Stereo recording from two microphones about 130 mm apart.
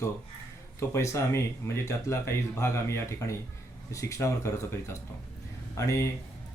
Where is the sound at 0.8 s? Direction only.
20° left (ahead or behind).